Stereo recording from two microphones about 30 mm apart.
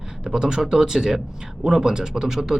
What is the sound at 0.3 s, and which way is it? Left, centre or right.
A man's voice, right.